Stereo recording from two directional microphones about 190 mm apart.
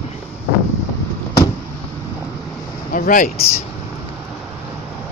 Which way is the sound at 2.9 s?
45° left (ahead or behind).